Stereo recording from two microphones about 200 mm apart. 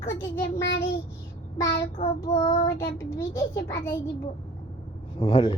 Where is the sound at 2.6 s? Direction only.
15° left (ahead or behind).